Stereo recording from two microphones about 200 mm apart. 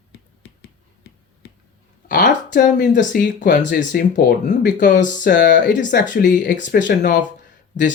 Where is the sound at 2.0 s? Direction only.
40° left (ahead or behind).